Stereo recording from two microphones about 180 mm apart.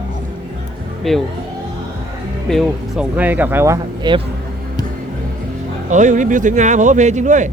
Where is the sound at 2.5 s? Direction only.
5° right (ahead or behind); by 4.2 s 25° right (ahead or behind).